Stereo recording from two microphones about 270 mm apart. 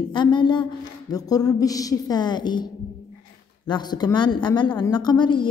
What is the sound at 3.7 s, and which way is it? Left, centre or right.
A woman's voice, centre.